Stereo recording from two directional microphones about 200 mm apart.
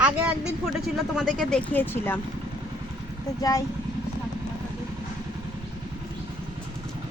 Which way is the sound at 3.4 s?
15° left (ahead or behind).